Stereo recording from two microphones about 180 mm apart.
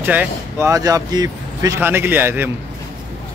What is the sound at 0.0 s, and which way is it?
Speech, 10° right (ahead or behind).